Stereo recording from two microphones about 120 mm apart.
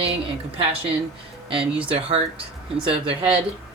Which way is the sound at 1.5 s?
50° right (ahead or behind).